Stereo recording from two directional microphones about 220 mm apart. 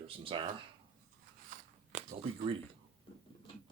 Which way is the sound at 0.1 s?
25° right (ahead or behind).